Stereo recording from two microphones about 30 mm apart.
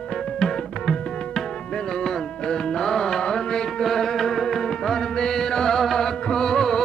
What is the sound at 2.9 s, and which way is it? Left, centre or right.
Music, left.